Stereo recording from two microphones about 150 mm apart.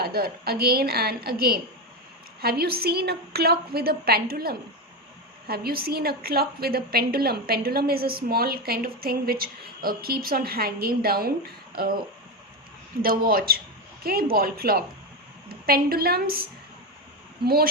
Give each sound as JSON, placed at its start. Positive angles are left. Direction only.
{"t": 0.0, "sound": "a woman's voice", "side_deg": -90}
{"t": 13.0, "sound": "a woman's voice", "side_deg": -80}